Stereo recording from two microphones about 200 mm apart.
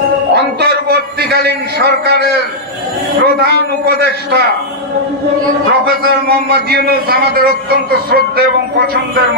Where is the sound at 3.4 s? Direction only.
55° right (ahead or behind).